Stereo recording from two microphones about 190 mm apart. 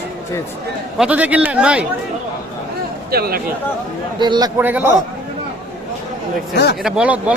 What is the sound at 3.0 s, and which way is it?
Speech, 55° right (ahead or behind).